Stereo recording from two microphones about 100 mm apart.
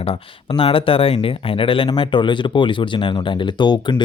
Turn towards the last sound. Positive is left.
turn(degrees=45)  # may be behind; listen again after turning